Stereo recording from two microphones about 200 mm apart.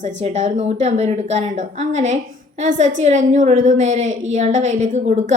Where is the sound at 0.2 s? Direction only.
35° right (ahead or behind).